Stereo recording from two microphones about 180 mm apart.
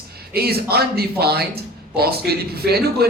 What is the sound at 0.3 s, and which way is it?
Speech, 60° right (ahead or behind).